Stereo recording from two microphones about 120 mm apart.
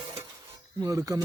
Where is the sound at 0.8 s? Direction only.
30° right (ahead or behind).